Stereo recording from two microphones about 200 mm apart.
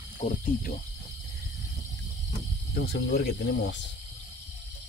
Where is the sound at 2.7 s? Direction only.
50° left (ahead or behind).